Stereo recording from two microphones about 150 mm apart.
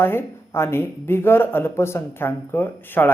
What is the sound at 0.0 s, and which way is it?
Speech, 15° left (ahead or behind).